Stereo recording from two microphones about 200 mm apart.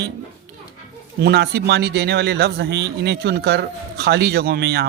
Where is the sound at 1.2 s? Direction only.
55° right (ahead or behind).